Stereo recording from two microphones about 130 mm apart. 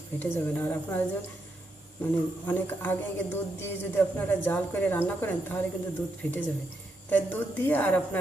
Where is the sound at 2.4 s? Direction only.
15° left (ahead or behind).